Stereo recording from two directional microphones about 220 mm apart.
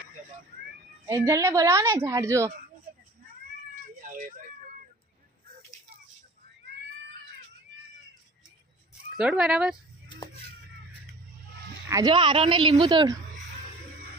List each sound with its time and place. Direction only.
1.0 s a woman's voice: 15° right (ahead or behind)
4.1 s a sound: 35° right (ahead or behind)
9.1 s speech: 5° right (ahead or behind)
11.9 s speech: 15° right (ahead or behind)